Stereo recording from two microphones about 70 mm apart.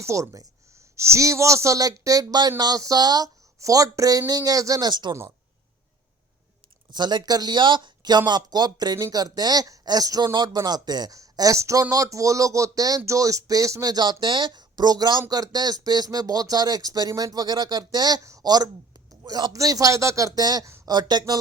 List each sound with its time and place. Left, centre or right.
0.0 s a man's voice: right
3.6 s a man's voice: right
6.9 s speech: right
10.3 s speech: right
11.2 s a man's voice: right
13.9 s speech: right
15.3 s speech: right
18.2 s a woman's voice: right
18.4 s speech: right
19.2 s speech: right
19.5 s a man's voice: right
20.4 s speech: right
20.8 s speech: right